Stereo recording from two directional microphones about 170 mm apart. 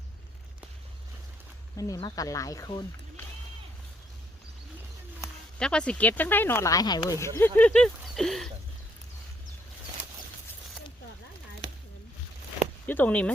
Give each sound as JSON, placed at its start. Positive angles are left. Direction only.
{"t": 1.7, "sound": "speech", "side_deg": 20}
{"t": 5.5, "sound": "speech", "side_deg": 5}
{"t": 12.8, "sound": "speech", "side_deg": 10}